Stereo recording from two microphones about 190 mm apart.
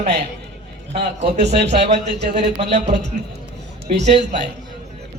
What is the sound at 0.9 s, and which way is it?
Speech, 35° right (ahead or behind).